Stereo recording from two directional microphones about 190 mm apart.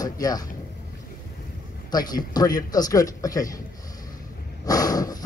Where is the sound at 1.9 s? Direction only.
20° left (ahead or behind).